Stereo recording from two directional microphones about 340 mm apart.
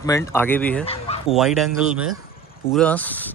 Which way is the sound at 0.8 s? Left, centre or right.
Centre.